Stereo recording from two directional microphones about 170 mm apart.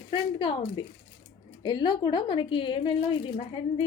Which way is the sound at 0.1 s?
30° left (ahead or behind).